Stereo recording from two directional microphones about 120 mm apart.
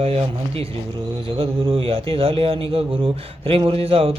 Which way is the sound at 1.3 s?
55° right (ahead or behind).